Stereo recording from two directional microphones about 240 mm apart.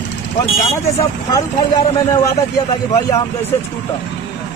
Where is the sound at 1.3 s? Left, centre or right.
Centre.